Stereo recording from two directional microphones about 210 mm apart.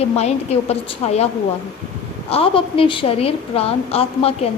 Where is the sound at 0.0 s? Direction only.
30° left (ahead or behind).